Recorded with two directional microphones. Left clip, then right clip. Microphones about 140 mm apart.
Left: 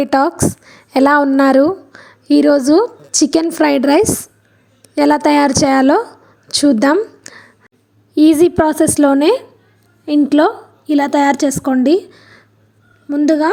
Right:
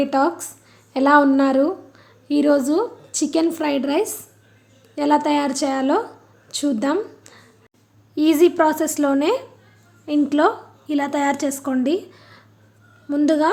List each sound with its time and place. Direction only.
0.0 s a woman's voice: 65° left (ahead or behind)
6.5 s a woman's voice: 50° left (ahead or behind)
7.3 s whispering: 55° left (ahead or behind)
8.1 s a woman's voice: 45° left (ahead or behind)
13.1 s speech: 20° left (ahead or behind)